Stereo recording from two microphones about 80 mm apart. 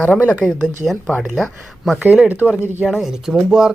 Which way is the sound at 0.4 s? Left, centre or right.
Centre.